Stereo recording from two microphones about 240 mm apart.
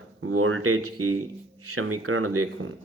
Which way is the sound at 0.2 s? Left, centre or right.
Right.